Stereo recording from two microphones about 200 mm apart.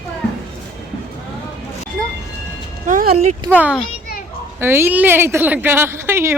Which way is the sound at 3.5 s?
5° right (ahead or behind).